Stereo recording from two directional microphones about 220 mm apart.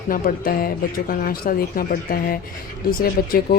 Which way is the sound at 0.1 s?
40° left (ahead or behind).